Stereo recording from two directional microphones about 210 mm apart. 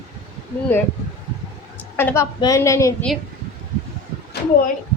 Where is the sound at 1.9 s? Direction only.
10° left (ahead or behind).